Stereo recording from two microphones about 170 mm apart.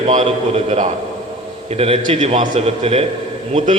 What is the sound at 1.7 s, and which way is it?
A man's voice, 35° right (ahead or behind).